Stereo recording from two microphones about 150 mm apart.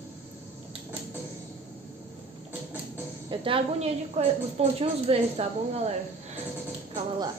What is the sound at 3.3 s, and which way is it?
Speech, 35° right (ahead or behind).